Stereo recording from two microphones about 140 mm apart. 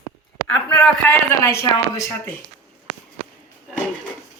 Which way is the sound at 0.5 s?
10° left (ahead or behind).